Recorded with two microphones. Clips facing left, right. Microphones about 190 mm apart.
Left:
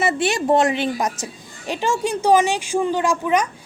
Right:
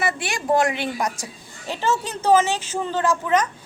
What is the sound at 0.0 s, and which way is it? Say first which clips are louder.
A woman's voice: left 6 dB; 25° left (ahead or behind).